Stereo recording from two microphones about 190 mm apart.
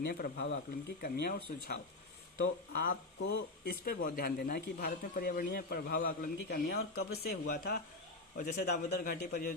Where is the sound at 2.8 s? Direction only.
55° left (ahead or behind).